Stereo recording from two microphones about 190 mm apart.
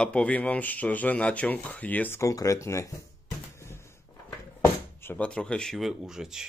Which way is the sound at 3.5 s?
15° left (ahead or behind).